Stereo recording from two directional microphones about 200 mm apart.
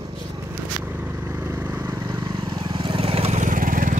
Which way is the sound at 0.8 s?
10° right (ahead or behind).